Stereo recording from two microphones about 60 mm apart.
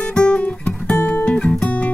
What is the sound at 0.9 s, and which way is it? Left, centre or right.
Guitar, centre.